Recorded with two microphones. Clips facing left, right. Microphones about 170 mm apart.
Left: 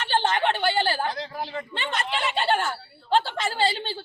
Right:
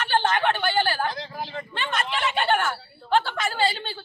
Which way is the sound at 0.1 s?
25° left (ahead or behind).